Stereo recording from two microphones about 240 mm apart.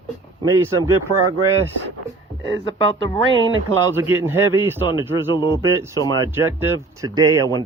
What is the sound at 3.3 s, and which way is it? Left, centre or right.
Speech, right.